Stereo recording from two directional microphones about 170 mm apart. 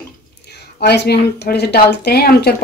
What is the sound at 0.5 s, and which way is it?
A woman's voice, 75° left (ahead or behind).